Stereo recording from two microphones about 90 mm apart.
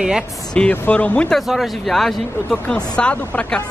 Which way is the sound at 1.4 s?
Centre (ahead or behind).